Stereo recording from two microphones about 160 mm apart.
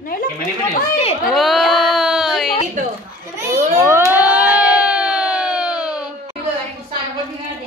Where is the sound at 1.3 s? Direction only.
Centre (ahead or behind).